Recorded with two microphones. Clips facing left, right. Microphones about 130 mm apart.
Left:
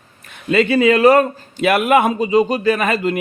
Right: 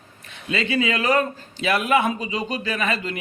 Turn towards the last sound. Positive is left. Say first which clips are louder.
# left 9 dB
turn(degrees=45)  # may be behind; listen again after turning